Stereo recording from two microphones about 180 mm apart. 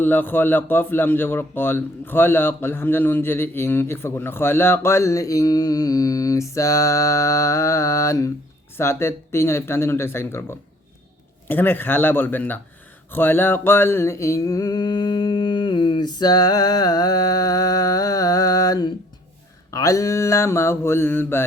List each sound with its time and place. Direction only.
0.0 s a man's voice: 10° left (ahead or behind)
13.1 s a sound: 10° left (ahead or behind)
19.7 s a man's voice: 20° left (ahead or behind)